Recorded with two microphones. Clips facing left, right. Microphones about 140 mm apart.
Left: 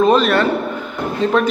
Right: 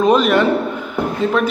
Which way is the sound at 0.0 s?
15° right (ahead or behind).